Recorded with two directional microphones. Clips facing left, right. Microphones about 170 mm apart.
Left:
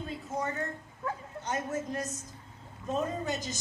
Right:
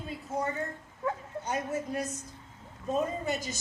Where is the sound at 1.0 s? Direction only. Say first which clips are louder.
Right 3 dB; 15° right (ahead or behind).